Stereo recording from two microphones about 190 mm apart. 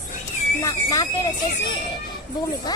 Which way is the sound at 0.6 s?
20° left (ahead or behind).